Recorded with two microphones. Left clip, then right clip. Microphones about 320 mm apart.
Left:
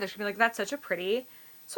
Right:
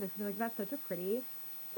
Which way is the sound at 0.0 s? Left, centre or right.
Centre.